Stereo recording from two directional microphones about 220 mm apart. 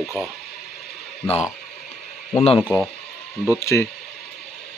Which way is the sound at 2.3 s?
25° left (ahead or behind).